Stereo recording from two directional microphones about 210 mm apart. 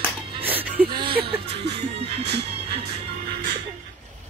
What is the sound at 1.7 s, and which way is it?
Music, 30° right (ahead or behind).